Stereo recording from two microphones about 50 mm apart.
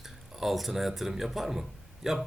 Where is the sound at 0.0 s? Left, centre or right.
Centre.